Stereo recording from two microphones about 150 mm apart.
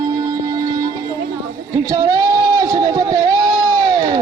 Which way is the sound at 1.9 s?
25° right (ahead or behind).